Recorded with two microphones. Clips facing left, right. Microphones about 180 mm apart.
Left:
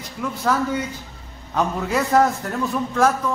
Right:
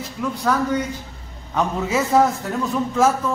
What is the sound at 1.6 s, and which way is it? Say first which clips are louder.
A man's voice: right 1 dB; centre (ahead or behind).